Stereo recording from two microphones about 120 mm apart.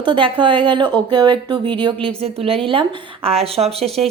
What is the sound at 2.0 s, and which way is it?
A woman's voice, 55° right (ahead or behind).